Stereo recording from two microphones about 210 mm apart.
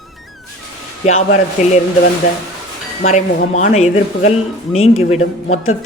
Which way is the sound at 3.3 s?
35° left (ahead or behind).